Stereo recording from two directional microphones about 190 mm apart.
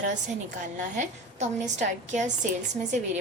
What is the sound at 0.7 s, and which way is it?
A woman's voice, 40° right (ahead or behind).